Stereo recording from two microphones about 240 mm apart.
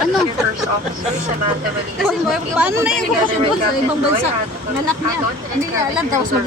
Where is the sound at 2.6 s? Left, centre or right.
Centre.